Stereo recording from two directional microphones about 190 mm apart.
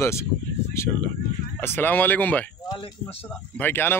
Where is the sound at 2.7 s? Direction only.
30° left (ahead or behind).